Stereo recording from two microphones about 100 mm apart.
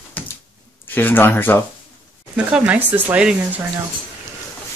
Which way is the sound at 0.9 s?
20° left (ahead or behind).